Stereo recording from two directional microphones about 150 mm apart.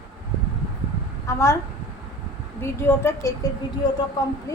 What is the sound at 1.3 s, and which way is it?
Speech, 20° left (ahead or behind).